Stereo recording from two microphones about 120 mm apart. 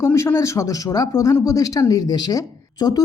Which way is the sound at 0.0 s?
25° left (ahead or behind).